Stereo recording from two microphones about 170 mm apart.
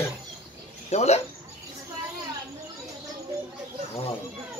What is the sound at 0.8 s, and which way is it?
Speech, 40° left (ahead or behind).